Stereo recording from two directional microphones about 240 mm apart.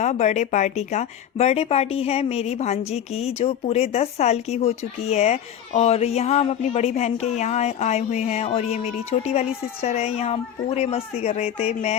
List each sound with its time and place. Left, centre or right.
0.0 s a woman's voice: left